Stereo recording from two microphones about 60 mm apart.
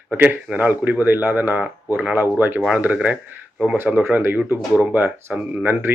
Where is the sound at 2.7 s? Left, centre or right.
Right.